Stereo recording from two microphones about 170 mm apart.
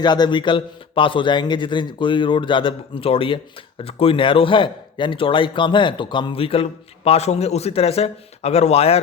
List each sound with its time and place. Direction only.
0.0 s a man's voice: 25° left (ahead or behind)